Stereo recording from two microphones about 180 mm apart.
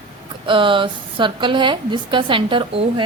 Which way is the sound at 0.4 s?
30° right (ahead or behind).